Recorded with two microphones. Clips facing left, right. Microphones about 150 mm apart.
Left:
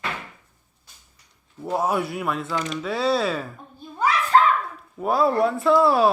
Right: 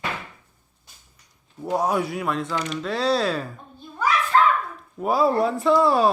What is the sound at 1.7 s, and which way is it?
A child's voice, centre (ahead or behind).